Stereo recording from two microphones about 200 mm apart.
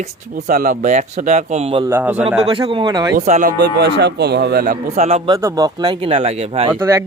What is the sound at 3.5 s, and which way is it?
Speech, 55° right (ahead or behind).